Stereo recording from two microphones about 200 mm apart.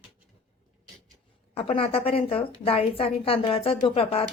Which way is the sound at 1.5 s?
30° left (ahead or behind).